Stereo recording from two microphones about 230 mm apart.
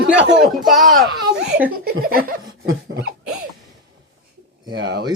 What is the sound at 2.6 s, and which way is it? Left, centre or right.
Dog, right.